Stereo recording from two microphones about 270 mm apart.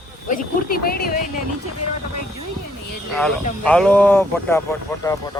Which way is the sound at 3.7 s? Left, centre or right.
Centre.